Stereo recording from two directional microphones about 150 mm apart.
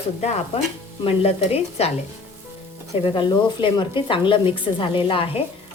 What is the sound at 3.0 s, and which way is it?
Speech, 35° left (ahead or behind).